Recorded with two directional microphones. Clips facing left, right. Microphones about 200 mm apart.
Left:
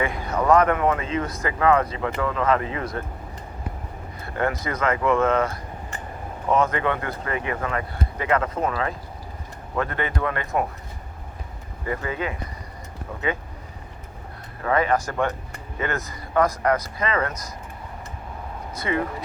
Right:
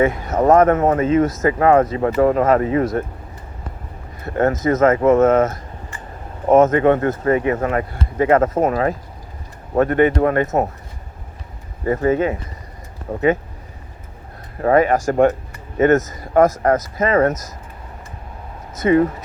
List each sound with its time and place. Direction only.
0.3 s speech: 45° right (ahead or behind)
4.4 s speech: 45° right (ahead or behind)
6.8 s speech: 45° right (ahead or behind)
11.9 s speech: 40° right (ahead or behind)
14.6 s speech: 40° right (ahead or behind)
18.7 s speech: 45° right (ahead or behind)